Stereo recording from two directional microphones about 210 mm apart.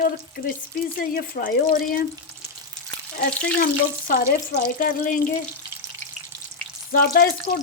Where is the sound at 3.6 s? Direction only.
45° left (ahead or behind).